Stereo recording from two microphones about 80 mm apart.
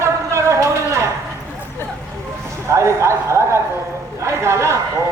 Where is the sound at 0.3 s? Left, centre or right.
Right.